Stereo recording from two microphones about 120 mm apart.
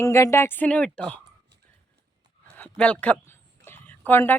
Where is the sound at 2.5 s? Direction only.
10° left (ahead or behind).